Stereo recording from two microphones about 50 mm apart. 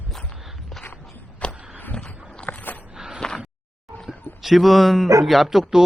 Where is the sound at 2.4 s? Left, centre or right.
Left.